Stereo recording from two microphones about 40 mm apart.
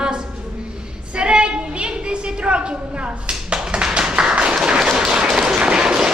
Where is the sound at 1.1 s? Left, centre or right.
Right.